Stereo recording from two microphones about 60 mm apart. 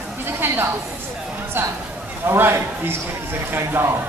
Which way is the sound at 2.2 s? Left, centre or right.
Right.